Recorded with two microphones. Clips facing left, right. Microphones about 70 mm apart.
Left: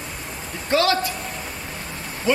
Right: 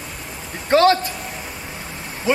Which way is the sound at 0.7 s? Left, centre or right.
Right.